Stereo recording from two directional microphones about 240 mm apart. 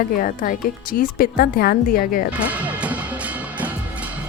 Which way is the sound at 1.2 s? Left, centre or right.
Left.